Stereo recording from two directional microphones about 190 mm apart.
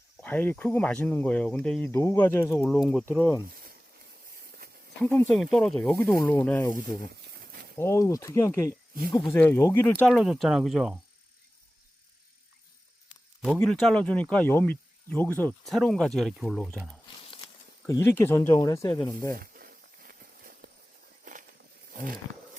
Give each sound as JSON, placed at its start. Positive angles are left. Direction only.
{"t": 0.2, "sound": "speech", "side_deg": 10}
{"t": 2.5, "sound": "speech", "side_deg": 0}
{"t": 5.0, "sound": "speech", "side_deg": 5}
{"t": 7.1, "sound": "a sound", "side_deg": -55}
{"t": 7.8, "sound": "speech", "side_deg": 15}
{"t": 13.4, "sound": "speech", "side_deg": 5}
{"t": 17.8, "sound": "speech", "side_deg": 15}
{"t": 19.4, "sound": "snake", "side_deg": -50}
{"t": 21.9, "sound": "wild animals", "side_deg": -50}